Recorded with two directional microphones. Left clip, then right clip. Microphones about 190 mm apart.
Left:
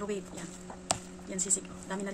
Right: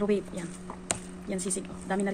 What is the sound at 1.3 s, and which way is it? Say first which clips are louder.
Speech: right 1 dB; 25° right (ahead or behind).